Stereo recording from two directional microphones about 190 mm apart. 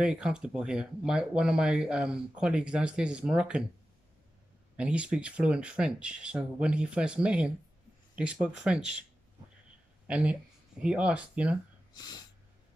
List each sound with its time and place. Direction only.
0.0 s speech: 5° right (ahead or behind)
4.7 s speech: 5° right (ahead or behind)
10.0 s speech: 5° right (ahead or behind)
11.9 s snort: 20° left (ahead or behind)